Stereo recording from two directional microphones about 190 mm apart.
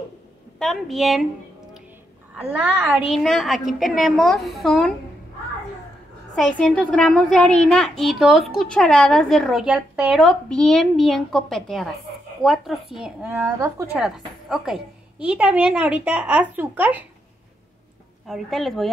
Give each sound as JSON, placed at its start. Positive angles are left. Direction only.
{"t": 0.6, "sound": "a child's voice", "side_deg": 0}
{"t": 2.3, "sound": "a woman's voice", "side_deg": -5}
{"t": 6.3, "sound": "a child's voice", "side_deg": 5}
{"t": 18.2, "sound": "a child's voice", "side_deg": 0}